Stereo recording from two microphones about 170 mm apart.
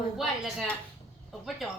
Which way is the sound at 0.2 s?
Centre (ahead or behind).